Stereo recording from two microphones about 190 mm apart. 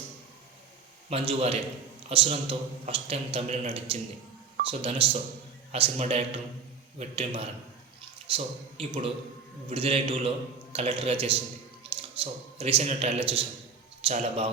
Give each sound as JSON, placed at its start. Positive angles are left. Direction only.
{"t": 1.1, "sound": "a man's voice", "side_deg": -30}